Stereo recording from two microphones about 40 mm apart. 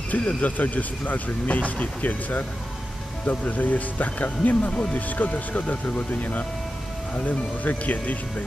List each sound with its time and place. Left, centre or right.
0.1 s speech: left